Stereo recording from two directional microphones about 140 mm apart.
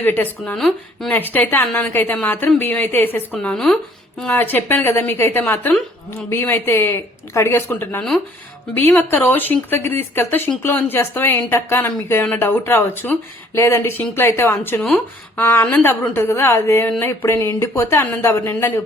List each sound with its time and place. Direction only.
0.0 s speech: 15° left (ahead or behind)
0.5 s speech: centre (ahead or behind)
1.1 s speech: 15° left (ahead or behind)